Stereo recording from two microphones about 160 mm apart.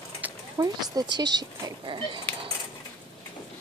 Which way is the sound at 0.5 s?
25° right (ahead or behind).